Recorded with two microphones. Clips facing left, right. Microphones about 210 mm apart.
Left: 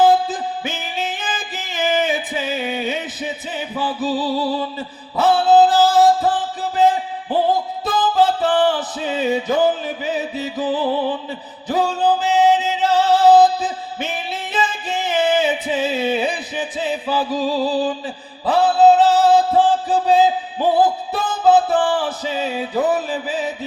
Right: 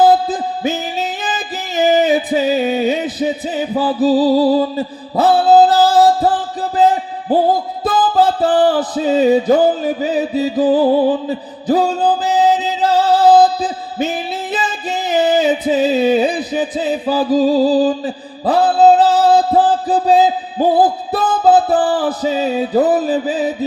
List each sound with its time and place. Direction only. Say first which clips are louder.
0.0 s music: right 3 dB; 35° right (ahead or behind)